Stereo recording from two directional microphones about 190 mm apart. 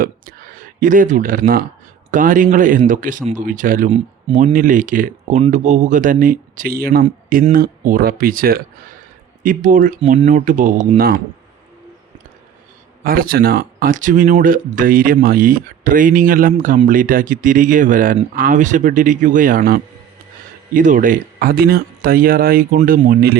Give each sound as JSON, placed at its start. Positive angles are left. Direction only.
{"t": 0.0, "sound": "speech", "side_deg": -45}
{"t": 13.1, "sound": "speech", "side_deg": -50}